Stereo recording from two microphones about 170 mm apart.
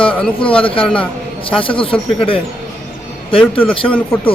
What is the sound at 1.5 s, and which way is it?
Speech, 30° left (ahead or behind).